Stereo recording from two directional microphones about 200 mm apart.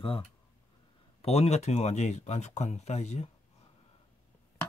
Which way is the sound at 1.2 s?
30° left (ahead or behind).